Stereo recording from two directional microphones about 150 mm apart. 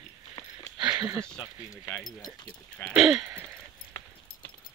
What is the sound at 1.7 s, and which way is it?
Speech, 25° left (ahead or behind).